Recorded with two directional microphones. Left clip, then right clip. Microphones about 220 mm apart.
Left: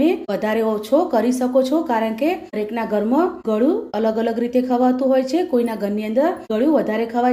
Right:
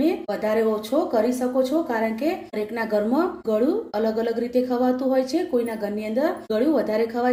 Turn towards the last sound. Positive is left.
turn(degrees=25)  # may be behind; listen again after turning